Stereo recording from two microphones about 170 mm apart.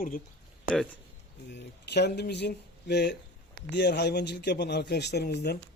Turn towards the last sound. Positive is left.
turn(degrees=75)  # may be behind; listen again after turning